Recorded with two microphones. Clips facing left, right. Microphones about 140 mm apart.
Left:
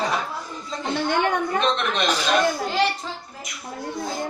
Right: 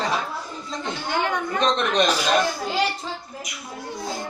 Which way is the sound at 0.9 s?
55° left (ahead or behind).